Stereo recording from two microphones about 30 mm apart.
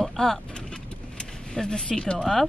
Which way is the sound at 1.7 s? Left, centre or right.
Left.